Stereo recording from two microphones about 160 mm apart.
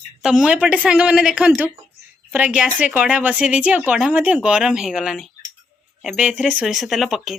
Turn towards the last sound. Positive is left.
turn(degrees=0)  # may be behind; listen again after turning